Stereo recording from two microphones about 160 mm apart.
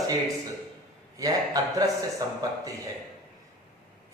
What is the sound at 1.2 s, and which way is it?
Speech, 20° right (ahead or behind).